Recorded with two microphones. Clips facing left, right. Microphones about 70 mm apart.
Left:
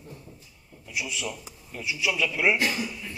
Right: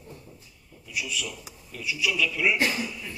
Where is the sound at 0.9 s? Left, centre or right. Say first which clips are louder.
Left 1 dB; left.